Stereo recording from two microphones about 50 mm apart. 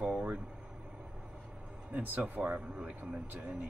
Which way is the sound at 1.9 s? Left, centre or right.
Right.